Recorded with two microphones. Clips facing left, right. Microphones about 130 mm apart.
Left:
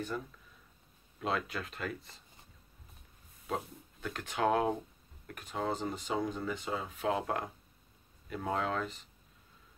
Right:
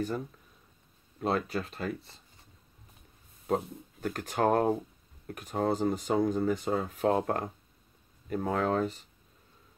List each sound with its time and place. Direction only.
1.2 s speech: 40° right (ahead or behind)
3.4 s speech: 45° right (ahead or behind)